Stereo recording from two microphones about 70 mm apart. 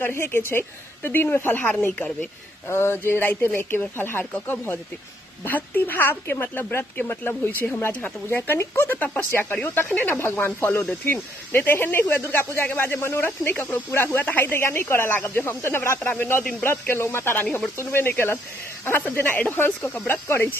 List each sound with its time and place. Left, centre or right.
0.0 s speech: left
2.7 s speech: left